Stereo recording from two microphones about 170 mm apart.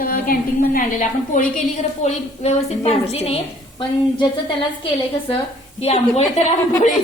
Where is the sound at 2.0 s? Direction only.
40° left (ahead or behind).